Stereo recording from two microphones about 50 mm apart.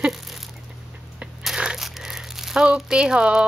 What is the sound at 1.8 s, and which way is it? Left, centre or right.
Crumpling, centre.